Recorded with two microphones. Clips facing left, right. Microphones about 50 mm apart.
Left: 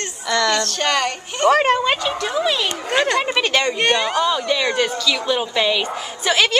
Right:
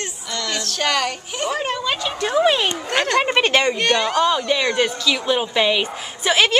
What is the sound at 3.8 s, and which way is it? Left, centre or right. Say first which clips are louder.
Speech: even; centre.